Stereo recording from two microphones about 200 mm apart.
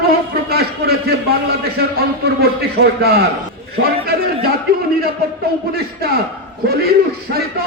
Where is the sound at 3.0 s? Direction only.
50° right (ahead or behind).